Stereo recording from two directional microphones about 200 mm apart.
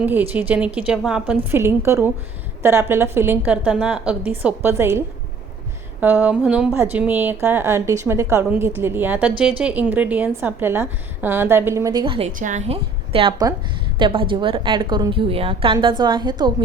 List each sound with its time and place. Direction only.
0.0 s a woman's voice: 10° right (ahead or behind); by 12.3 s 25° right (ahead or behind)
12.4 s a woman's voice: 35° right (ahead or behind); by 16.3 s 20° right (ahead or behind)